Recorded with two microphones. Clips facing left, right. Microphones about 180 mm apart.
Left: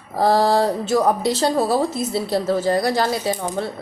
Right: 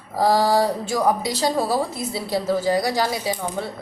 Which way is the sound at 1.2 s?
10° right (ahead or behind).